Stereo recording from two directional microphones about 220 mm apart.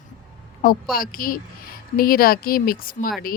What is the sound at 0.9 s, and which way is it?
Speech, 40° left (ahead or behind).